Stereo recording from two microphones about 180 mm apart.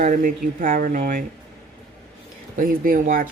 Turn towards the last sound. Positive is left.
turn(degrees=-50)  # may be behind; listen again after turning